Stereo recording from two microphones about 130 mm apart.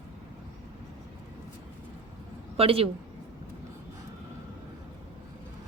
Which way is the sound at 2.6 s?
45° right (ahead or behind).